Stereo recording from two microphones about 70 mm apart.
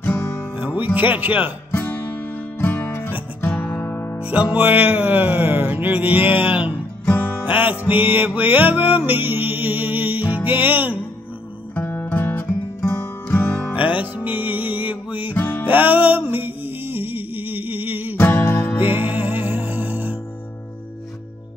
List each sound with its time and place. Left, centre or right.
0.7 s music: right
1.7 s music: left
4.2 s music: centre
11.7 s music: left
13.7 s music: right
15.3 s music: left
15.6 s music: right
18.1 s music: left
18.8 s music: right